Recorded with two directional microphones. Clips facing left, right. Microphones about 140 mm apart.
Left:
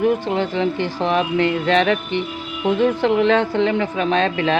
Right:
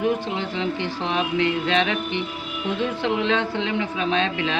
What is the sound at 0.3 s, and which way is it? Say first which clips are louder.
A woman's voice: left 6 dB; 45° left (ahead or behind).